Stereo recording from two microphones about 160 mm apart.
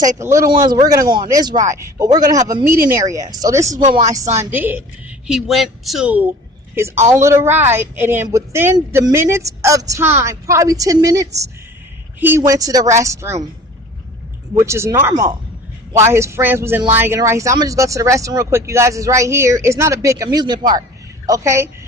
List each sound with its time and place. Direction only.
0.2 s speech: 15° right (ahead or behind)
5.3 s speech: centre (ahead or behind); by 13.5 s 20° right (ahead or behind)
14.6 s speech: 15° right (ahead or behind)